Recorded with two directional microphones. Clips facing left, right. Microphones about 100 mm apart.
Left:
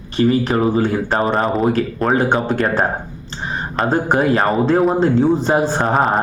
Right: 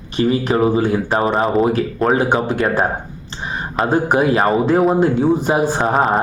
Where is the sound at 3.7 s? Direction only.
5° right (ahead or behind).